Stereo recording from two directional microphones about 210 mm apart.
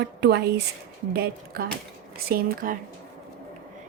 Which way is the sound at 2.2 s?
45° right (ahead or behind).